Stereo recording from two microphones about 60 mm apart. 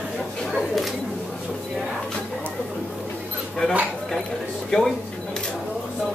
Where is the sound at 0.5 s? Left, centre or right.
Centre.